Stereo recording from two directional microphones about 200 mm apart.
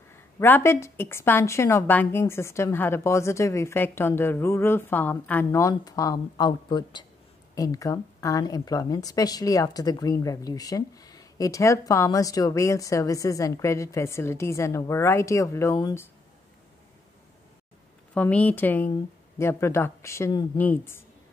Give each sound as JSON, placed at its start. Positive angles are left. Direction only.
{"t": 0.4, "sound": "speech", "side_deg": 10}
{"t": 18.1, "sound": "speech", "side_deg": 5}